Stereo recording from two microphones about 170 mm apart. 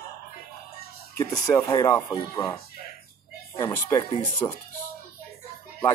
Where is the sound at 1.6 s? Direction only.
20° left (ahead or behind).